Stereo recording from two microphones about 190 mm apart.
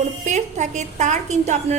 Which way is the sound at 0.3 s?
40° right (ahead or behind).